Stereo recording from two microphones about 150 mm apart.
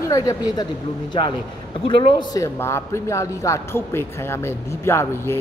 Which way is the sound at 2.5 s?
15° left (ahead or behind).